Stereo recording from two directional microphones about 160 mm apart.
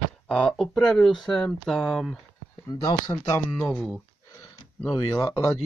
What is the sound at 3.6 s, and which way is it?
Speech, 5° left (ahead or behind).